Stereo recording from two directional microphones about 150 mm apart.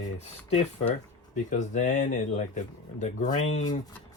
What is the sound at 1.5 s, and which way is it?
Speech, 55° left (ahead or behind).